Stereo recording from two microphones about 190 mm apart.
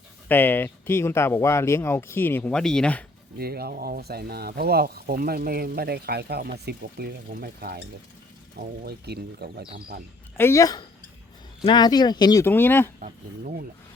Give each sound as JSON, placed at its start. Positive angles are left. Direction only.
{"t": 0.3, "sound": "speech", "side_deg": 10}
{"t": 3.3, "sound": "speech", "side_deg": -55}
{"t": 10.3, "sound": "speech", "side_deg": 15}
{"t": 13.0, "sound": "speech", "side_deg": -45}